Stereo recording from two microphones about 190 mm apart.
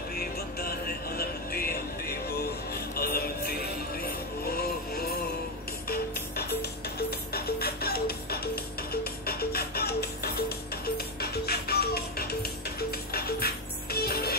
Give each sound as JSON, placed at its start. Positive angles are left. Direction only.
{"t": 0.1, "sound": "music", "side_deg": 55}